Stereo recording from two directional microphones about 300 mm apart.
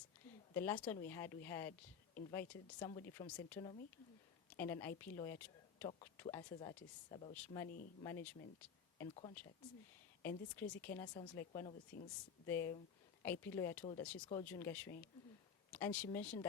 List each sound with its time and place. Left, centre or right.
0.5 s a woman's voice: centre
7.3 s speech: centre
10.2 s speech: centre
11.9 s speech: left
12.5 s speech: centre